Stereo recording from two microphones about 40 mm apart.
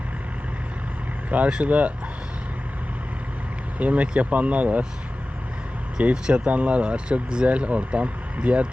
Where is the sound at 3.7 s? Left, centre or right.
Right.